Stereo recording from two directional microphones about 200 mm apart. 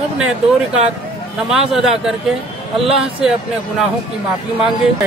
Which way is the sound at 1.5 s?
Centre (ahead or behind).